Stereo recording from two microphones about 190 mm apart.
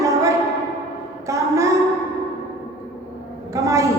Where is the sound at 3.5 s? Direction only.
15° right (ahead or behind).